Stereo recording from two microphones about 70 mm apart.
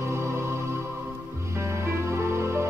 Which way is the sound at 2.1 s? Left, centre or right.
Right.